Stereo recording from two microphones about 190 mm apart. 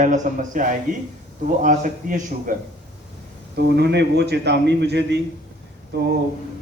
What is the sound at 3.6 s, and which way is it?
Speech, 60° right (ahead or behind).